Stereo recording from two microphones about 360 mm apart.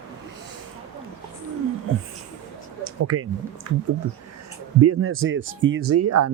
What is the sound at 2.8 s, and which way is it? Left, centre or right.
Speech, right.